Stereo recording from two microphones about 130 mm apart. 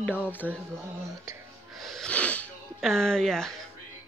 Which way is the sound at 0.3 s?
15° left (ahead or behind).